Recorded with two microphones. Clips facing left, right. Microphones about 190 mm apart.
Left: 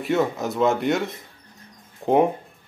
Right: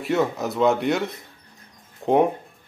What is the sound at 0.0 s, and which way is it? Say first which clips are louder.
Speech: even; centre (ahead or behind).